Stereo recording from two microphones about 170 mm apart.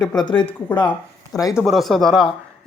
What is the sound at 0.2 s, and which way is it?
Speech, 25° left (ahead or behind).